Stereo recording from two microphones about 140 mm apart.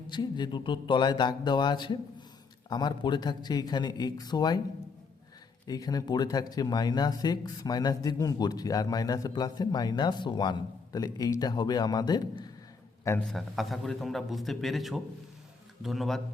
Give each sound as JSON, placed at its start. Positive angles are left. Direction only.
{"t": 0.1, "sound": "a man's voice", "side_deg": 30}
{"t": 5.6, "sound": "speech", "side_deg": 25}
{"t": 13.3, "sound": "a man's voice", "side_deg": 0}